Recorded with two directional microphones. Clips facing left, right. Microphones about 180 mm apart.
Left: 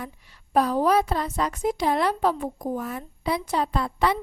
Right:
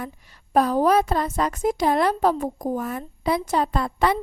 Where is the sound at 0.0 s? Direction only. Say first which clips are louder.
Right 3 dB; 45° right (ahead or behind).